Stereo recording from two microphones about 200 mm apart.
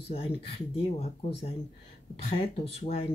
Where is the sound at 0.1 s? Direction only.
30° left (ahead or behind).